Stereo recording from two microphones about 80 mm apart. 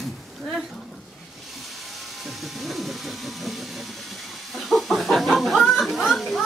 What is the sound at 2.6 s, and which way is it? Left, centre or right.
Vehicle, centre.